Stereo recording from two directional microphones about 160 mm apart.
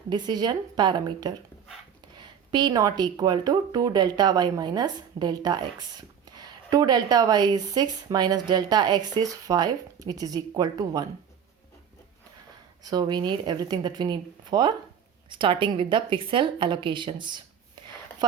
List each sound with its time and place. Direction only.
0.1 s speech: 25° right (ahead or behind)
12.8 s a woman's voice: 25° right (ahead or behind)